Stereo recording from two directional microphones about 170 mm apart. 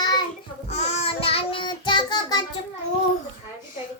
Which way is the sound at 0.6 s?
40° left (ahead or behind).